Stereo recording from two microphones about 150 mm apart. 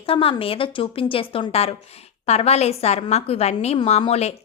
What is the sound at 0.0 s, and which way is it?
A woman's voice, 40° left (ahead or behind).